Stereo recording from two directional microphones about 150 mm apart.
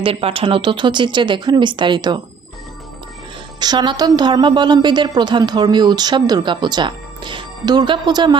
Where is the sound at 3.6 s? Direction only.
30° right (ahead or behind).